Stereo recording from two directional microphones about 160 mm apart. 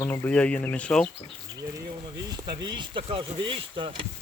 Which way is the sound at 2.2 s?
25° right (ahead or behind).